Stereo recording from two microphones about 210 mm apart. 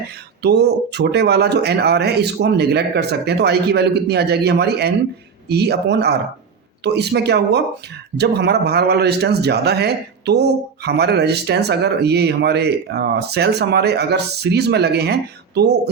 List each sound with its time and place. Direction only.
0.4 s a man's voice: 50° right (ahead or behind)